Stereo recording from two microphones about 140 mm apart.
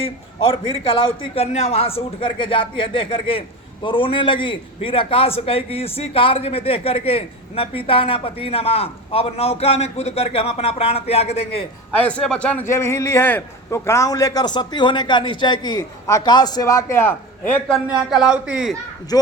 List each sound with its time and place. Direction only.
0.0 s a man's voice: 45° left (ahead or behind)
11.9 s a man's voice: 10° left (ahead or behind)
17.8 s speech: 5° right (ahead or behind)
19.1 s a man's voice: 25° left (ahead or behind)